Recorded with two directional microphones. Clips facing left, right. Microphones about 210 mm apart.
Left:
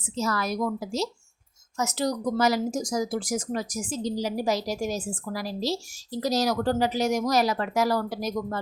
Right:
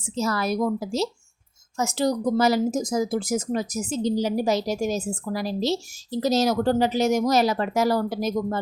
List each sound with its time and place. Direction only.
0.2 s speech: 30° right (ahead or behind)